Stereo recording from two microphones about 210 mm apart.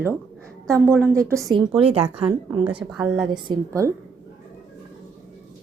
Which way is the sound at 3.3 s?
20° right (ahead or behind).